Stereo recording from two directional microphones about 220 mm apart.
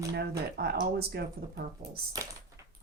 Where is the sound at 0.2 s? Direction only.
45° right (ahead or behind).